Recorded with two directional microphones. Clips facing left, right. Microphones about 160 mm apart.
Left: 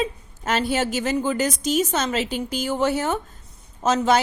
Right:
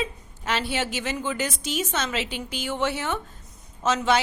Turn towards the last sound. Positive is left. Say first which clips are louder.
# left 3 dB
turn(degrees=40)  # may be behind; listen again after turning